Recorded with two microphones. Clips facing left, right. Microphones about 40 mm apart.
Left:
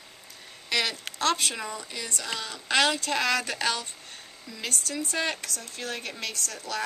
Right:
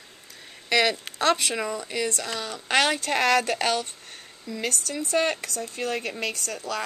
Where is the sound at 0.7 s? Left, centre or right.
Right.